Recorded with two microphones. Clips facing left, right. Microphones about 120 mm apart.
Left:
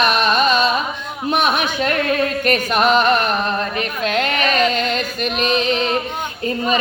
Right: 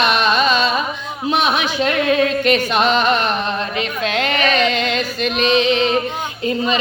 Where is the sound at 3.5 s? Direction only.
40° left (ahead or behind).